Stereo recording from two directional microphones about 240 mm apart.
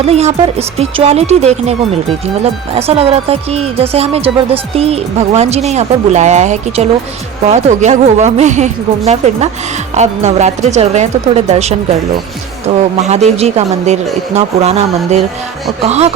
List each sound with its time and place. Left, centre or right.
0.0 s speech: right
13.0 s speech: right